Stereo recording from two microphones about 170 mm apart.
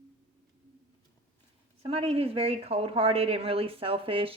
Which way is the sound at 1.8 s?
35° right (ahead or behind).